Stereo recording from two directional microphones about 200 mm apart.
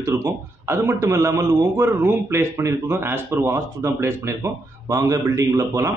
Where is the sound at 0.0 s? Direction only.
15° right (ahead or behind).